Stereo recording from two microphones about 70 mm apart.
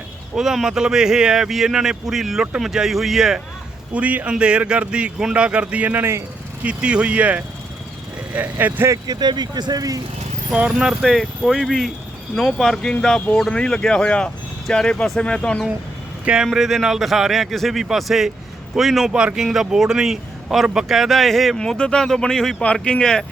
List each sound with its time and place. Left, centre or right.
0.3 s speech: centre
3.9 s speech: right
6.7 s speech: centre
9.0 s speech: right
10.5 s speech: centre
11.0 s speech: centre
16.2 s speech: centre